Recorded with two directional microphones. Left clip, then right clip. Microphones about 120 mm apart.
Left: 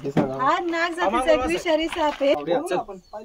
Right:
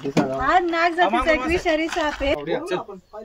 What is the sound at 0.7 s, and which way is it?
A woman's voice, 35° left (ahead or behind).